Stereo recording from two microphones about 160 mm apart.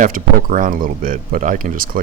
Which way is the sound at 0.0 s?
60° right (ahead or behind).